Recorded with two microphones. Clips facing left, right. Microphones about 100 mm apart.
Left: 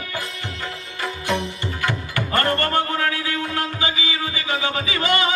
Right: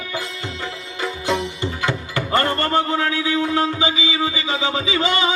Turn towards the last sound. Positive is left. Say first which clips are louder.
# right 2 dB
turn(degrees=-20)  # may be behind; listen again after turning